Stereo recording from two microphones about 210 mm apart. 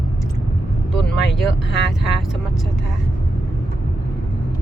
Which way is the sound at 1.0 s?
Centre (ahead or behind).